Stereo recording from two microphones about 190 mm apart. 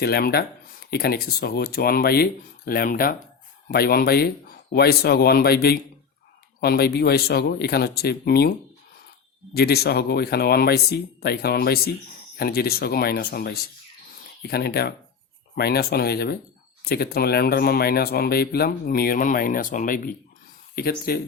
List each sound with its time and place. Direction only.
0.0 s speech: 55° left (ahead or behind)
9.6 s speech: 55° left (ahead or behind)